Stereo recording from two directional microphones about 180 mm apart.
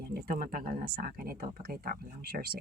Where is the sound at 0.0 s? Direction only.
60° right (ahead or behind).